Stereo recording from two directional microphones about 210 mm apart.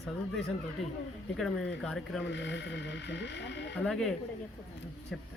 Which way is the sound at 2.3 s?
60° left (ahead or behind).